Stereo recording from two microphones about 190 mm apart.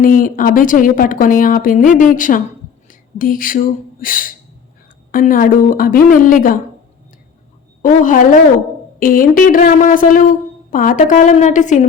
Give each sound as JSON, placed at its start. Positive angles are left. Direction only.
{"t": 0.0, "sound": "speech", "side_deg": 45}
{"t": 7.8, "sound": "speech", "side_deg": 45}